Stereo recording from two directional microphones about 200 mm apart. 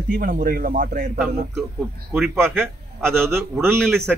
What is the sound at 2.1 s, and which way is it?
Speech, 10° right (ahead or behind).